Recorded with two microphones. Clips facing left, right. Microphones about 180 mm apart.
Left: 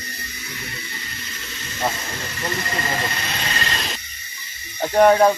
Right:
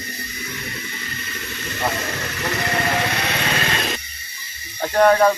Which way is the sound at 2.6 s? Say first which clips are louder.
Right 6 dB; 70° right (ahead or behind).